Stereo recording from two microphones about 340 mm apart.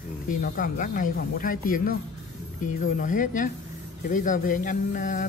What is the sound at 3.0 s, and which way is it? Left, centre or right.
Speech, left.